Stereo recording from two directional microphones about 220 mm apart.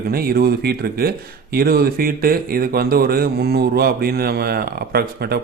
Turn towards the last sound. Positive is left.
turn(degrees=-45)  # may be behind; listen again after turning